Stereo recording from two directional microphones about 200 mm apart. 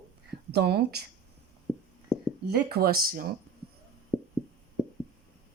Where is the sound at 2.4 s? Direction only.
50° right (ahead or behind).